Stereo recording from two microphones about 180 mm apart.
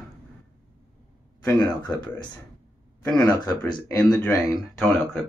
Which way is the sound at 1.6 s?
25° left (ahead or behind).